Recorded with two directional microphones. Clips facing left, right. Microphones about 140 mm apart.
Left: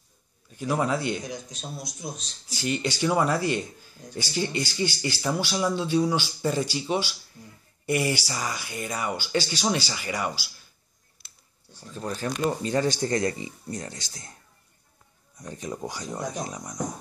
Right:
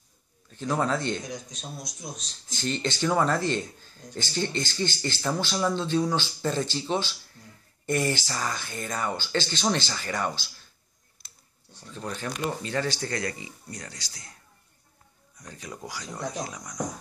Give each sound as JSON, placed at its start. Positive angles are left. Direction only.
{"t": 0.5, "sound": "a man's voice", "side_deg": 10}
{"t": 11.7, "sound": "a man's voice", "side_deg": 5}
{"t": 12.0, "sound": "speech", "side_deg": 35}
{"t": 12.7, "sound": "speech", "side_deg": 20}
{"t": 15.3, "sound": "speech", "side_deg": 25}